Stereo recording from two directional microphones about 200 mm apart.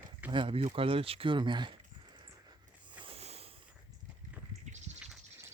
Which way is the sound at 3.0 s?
30° right (ahead or behind).